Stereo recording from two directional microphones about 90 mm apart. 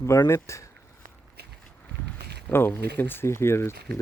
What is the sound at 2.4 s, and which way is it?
Speech, 25° left (ahead or behind).